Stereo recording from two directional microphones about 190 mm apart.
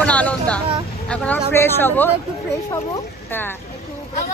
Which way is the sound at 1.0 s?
5° left (ahead or behind).